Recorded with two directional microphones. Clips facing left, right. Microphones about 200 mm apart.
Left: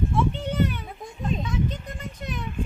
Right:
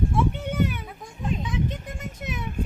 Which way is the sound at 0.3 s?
10° right (ahead or behind).